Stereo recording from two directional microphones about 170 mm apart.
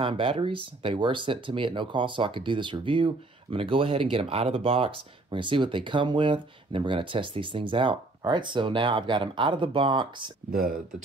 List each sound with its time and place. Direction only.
0.0 s speech: 30° right (ahead or behind)